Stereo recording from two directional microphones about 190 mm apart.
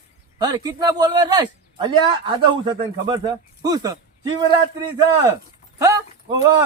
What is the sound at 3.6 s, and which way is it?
Speech, 20° right (ahead or behind).